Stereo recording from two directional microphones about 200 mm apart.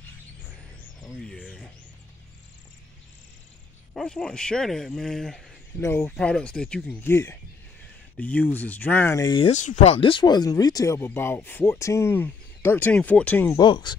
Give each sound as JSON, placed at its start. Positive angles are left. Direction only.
{"t": 1.1, "sound": "music", "side_deg": 0}
{"t": 3.9, "sound": "speech", "side_deg": 5}
{"t": 9.5, "sound": "speech", "side_deg": 40}
{"t": 9.8, "sound": "speech", "side_deg": 25}
{"t": 13.6, "sound": "speech", "side_deg": 20}